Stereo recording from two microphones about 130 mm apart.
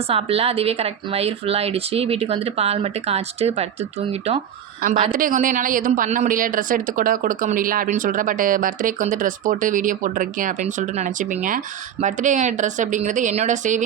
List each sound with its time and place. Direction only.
0.1 s speech: 50° right (ahead or behind)
5.1 s speech: 90° right
12.0 s a woman's voice: 70° right (ahead or behind)